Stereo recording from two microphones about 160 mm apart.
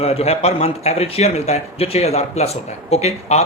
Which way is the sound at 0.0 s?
40° left (ahead or behind).